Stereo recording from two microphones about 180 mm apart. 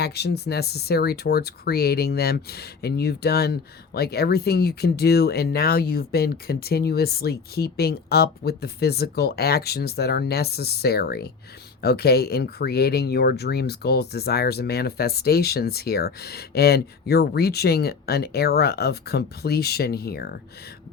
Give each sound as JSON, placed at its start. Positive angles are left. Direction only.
{"t": 0.0, "sound": "speech", "side_deg": 65}